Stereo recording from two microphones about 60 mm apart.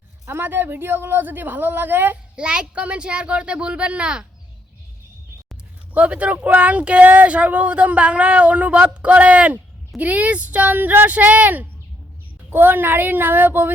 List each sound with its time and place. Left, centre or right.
0.3 s a woman's voice: right
2.3 s speech: centre
5.9 s a woman's voice: right